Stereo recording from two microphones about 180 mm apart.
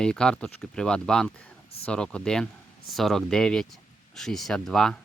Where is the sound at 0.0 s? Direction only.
5° left (ahead or behind).